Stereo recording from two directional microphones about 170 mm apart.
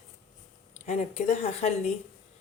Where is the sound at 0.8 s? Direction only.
40° left (ahead or behind).